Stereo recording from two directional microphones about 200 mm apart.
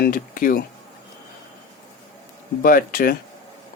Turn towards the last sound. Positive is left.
turn(degrees=45)  # may be behind; listen again after turning